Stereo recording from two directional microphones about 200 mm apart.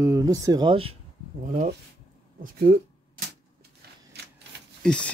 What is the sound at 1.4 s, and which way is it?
Speech, 40° right (ahead or behind).